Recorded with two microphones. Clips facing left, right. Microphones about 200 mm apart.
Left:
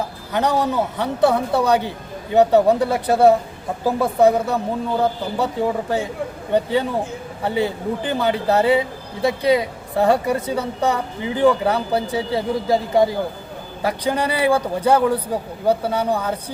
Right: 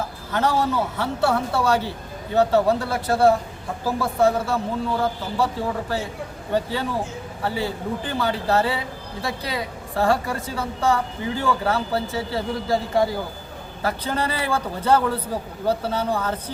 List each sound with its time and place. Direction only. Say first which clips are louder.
0.3 s a woman's voice: left 2 dB; 15° left (ahead or behind)
6.5 s a woman's voice: left 5 dB; 20° left (ahead or behind)